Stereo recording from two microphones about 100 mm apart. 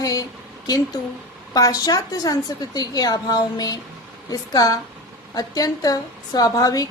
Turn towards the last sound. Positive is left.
turn(degrees=35)  # may be behind; listen again after turning